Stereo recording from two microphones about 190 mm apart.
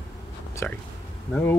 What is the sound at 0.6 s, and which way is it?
Speech, 10° left (ahead or behind).